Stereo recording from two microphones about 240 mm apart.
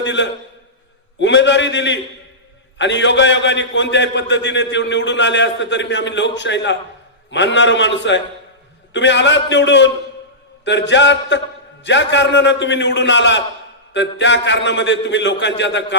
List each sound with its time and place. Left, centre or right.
0.0 s a man's voice: left